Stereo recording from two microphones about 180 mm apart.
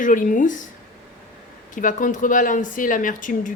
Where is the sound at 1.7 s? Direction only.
45° left (ahead or behind).